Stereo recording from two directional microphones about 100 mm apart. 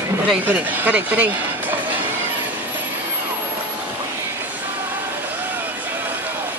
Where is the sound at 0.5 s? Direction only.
15° right (ahead or behind).